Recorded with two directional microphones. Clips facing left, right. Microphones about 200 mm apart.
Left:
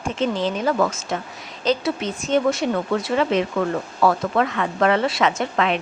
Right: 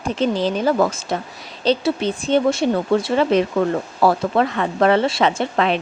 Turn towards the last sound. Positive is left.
turn(degrees=-30)  # may be behind; listen again after turning